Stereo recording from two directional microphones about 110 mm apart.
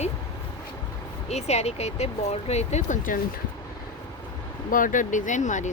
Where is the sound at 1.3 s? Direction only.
75° left (ahead or behind).